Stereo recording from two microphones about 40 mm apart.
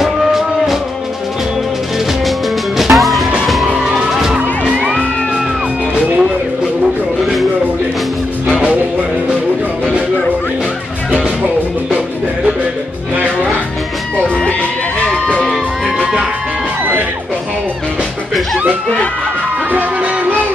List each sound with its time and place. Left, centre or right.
0.0 s music: centre
2.8 s music: centre
3.6 s music: centre
4.6 s music: right
8.5 s music: right
14.1 s music: left
19.7 s music: right